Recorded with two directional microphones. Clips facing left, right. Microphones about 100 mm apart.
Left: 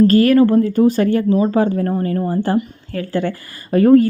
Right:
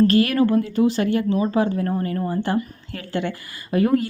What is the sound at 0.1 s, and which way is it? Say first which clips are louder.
Speech: left 6 dB; 40° left (ahead or behind).